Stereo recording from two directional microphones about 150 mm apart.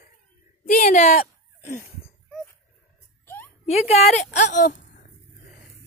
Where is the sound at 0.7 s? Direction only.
60° left (ahead or behind).